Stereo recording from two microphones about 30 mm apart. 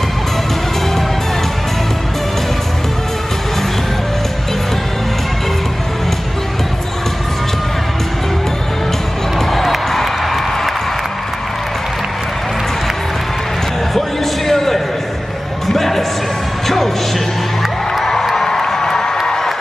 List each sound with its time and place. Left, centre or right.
9.5 s crowd: centre
13.9 s a sound: centre
15.6 s music: centre
17.9 s music: centre